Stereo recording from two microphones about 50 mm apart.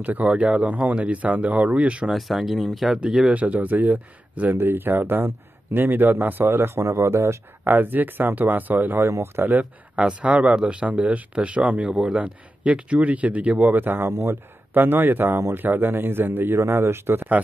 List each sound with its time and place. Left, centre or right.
0.0 s speech: right
2.0 s speech: centre
3.3 s speech: right
4.6 s speech: right
6.8 s speech: right
7.6 s speech: right
9.2 s speech: right
9.9 s speech: right
11.9 s speech: centre
12.2 s speech: right